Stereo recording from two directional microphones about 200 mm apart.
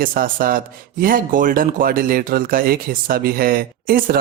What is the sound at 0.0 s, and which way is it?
Speech, 45° right (ahead or behind).